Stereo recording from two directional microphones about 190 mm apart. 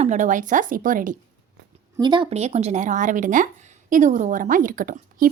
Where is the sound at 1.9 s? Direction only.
20° right (ahead or behind).